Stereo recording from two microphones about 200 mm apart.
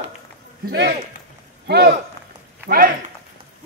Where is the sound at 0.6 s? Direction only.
50° right (ahead or behind).